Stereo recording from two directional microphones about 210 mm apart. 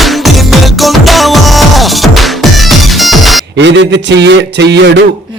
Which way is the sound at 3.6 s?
55° right (ahead or behind).